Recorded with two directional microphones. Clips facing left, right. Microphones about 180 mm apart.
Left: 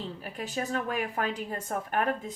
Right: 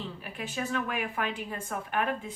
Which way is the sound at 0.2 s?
40° left (ahead or behind).